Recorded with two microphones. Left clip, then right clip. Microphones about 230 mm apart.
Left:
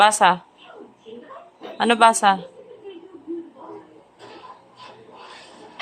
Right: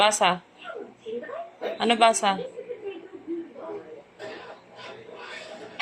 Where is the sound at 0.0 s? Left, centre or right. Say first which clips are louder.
Left 6 dB; left.